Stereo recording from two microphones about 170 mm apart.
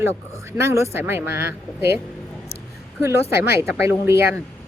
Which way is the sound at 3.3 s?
15° right (ahead or behind).